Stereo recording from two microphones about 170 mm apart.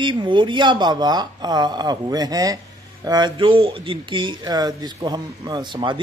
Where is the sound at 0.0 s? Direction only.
30° right (ahead or behind).